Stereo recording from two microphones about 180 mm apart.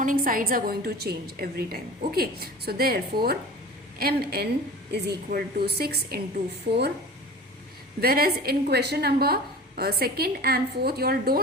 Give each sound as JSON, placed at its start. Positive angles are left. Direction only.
{"t": 0.0, "sound": "a woman's voice", "side_deg": -50}
{"t": 8.0, "sound": "a woman's voice", "side_deg": -55}